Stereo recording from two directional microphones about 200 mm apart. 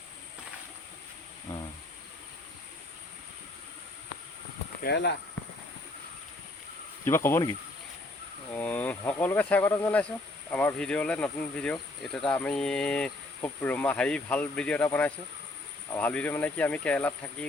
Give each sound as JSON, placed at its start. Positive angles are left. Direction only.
{"t": 4.8, "sound": "speech", "side_deg": 60}
{"t": 7.0, "sound": "speech", "side_deg": 10}
{"t": 8.5, "sound": "speech", "side_deg": 10}